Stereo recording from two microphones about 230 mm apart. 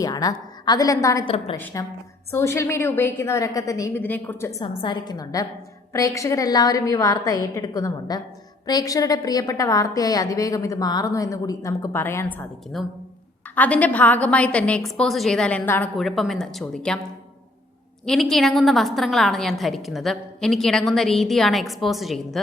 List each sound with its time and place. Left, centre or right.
0.0 s a woman's voice: centre
1.5 s a woman's voice: centre
18.0 s a woman's voice: centre